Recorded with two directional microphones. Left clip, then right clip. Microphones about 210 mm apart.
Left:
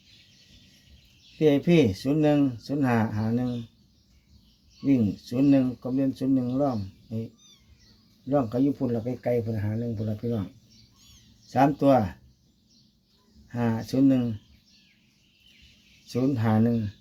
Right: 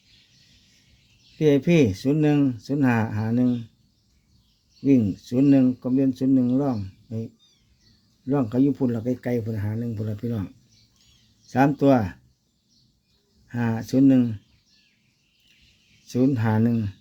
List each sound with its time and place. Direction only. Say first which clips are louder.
1.4 s speech: right 2 dB; 55° right (ahead or behind)
4.9 s speech: right 4 dB; 55° right (ahead or behind)
8.3 s speech: right 2 dB; 55° right (ahead or behind)
11.5 s speech: right 1 dB; 55° right (ahead or behind)
13.5 s speech: right 3 dB; 55° right (ahead or behind)
16.0 s speech: right 3 dB; 55° right (ahead or behind)